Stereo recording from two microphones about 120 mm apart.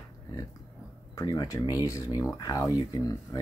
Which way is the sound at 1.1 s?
30° left (ahead or behind).